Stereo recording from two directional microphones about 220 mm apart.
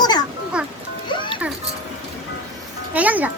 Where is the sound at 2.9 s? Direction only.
5° right (ahead or behind).